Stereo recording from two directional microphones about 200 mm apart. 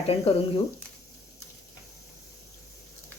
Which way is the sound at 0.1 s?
30° left (ahead or behind).